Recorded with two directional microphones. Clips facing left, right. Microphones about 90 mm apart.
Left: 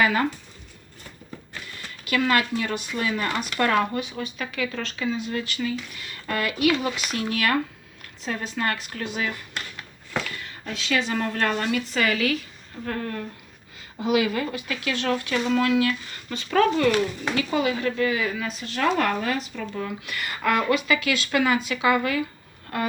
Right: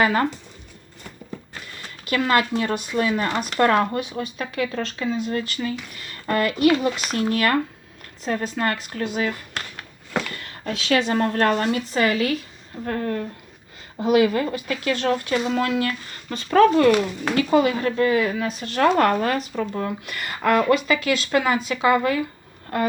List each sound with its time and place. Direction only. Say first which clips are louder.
0.0 s speech: right 2 dB; 35° right (ahead or behind)
2.0 s speech: right 2 dB; 35° right (ahead or behind)
9.7 s speech: right 4 dB; 60° right (ahead or behind); by 22.2 s 35° right (ahead or behind)